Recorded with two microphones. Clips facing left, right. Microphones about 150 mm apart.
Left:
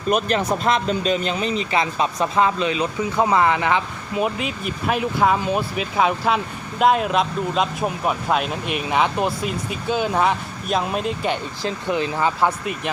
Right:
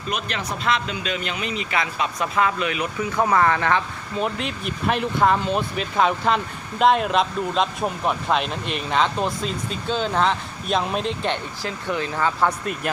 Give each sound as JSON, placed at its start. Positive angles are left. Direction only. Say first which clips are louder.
{"t": 0.1, "sound": "speech", "louder": "left 8 dB", "side_deg": 40}
{"t": 3.2, "sound": "speech", "louder": "left 1 dB", "side_deg": 15}
{"t": 11.6, "sound": "speech", "louder": "left 5 dB", "side_deg": 20}